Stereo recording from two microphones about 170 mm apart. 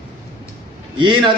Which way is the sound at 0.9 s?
30° right (ahead or behind).